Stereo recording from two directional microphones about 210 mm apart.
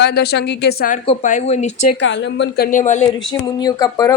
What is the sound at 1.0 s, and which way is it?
Speech, 35° left (ahead or behind).